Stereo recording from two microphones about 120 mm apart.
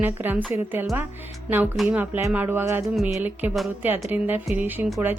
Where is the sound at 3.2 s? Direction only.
15° right (ahead or behind).